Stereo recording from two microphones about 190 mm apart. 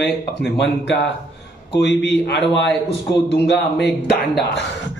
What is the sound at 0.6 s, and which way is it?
A man's voice, 65° left (ahead or behind).